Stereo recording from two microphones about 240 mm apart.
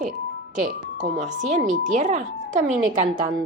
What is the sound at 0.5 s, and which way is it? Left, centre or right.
Speech, right.